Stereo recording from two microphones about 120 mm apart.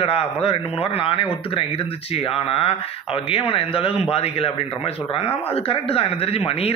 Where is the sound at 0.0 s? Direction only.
55° left (ahead or behind).